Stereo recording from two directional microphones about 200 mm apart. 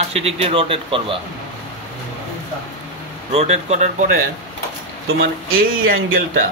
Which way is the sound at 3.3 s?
30° right (ahead or behind).